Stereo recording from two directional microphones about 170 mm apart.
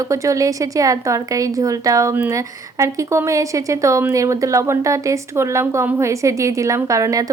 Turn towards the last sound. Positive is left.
turn(degrees=-20)  # may be behind; listen again after turning